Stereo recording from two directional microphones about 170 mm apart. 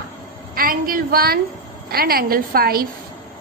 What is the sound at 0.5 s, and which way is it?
A woman's voice, 60° right (ahead or behind).